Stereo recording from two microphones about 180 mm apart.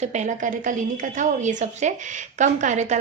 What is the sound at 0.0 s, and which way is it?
A woman's voice, 40° right (ahead or behind).